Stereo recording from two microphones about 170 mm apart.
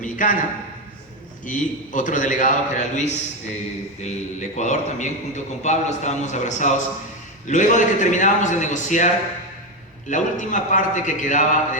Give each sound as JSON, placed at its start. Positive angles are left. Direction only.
{"t": 0.0, "sound": "a sound", "side_deg": 50}
{"t": 1.5, "sound": "a man's voice", "side_deg": 50}
{"t": 10.1, "sound": "a man's voice", "side_deg": 50}